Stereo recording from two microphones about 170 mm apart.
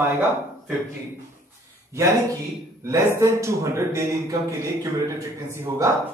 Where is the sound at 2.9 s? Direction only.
15° right (ahead or behind).